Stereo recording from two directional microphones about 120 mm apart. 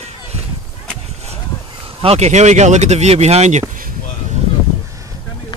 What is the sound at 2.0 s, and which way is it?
Speech, 60° right (ahead or behind).